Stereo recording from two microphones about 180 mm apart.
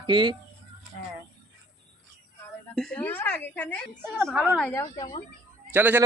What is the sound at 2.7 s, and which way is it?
A woman's voice, 5° left (ahead or behind).